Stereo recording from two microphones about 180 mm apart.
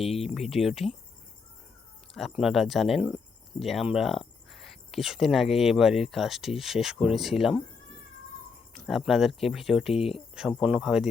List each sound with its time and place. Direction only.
0.2 s speech: centre (ahead or behind)
2.1 s speech: centre (ahead or behind)
8.7 s speech: centre (ahead or behind)
9.9 s speech: 30° left (ahead or behind)
10.6 s speech: 5° right (ahead or behind)